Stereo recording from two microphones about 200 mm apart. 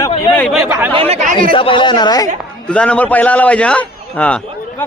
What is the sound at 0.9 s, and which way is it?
Speech, 30° right (ahead or behind).